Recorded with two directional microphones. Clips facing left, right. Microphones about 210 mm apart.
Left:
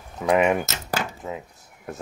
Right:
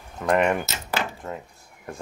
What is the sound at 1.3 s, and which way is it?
Speech, 5° left (ahead or behind).